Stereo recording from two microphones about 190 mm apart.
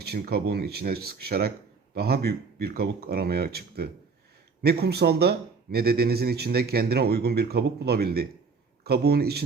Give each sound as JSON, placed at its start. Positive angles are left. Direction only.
{"t": 0.0, "sound": "speech", "side_deg": -55}